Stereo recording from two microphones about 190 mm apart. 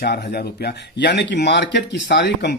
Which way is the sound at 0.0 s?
60° left (ahead or behind).